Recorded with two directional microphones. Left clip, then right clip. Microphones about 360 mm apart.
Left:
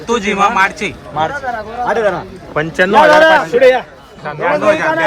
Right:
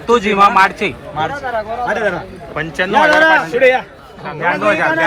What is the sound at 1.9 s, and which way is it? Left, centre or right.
Speech, left.